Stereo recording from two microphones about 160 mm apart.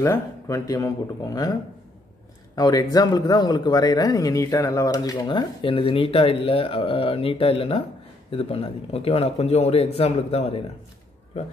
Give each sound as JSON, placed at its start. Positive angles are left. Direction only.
{"t": 0.0, "sound": "a man's voice", "side_deg": 20}